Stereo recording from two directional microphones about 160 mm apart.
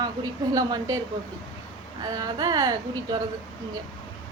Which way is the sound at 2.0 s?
25° right (ahead or behind).